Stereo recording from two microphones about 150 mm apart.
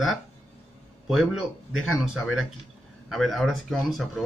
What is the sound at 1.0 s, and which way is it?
Speech, centre (ahead or behind).